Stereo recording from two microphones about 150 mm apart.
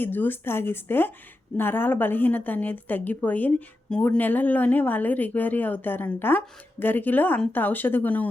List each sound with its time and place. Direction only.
0.0 s a woman's voice: 15° left (ahead or behind)